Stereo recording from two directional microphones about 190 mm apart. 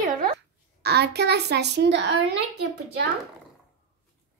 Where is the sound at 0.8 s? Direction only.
60° right (ahead or behind).